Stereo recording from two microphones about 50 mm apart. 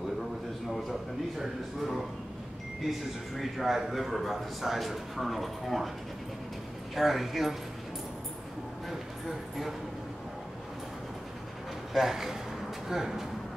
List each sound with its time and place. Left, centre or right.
1.4 s a man's voice: centre
3.3 s a man's voice: centre
7.0 s a man's voice: centre
8.8 s a sound: centre
11.9 s speech: centre